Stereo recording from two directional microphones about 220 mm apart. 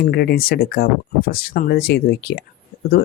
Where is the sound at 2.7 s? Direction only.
40° left (ahead or behind).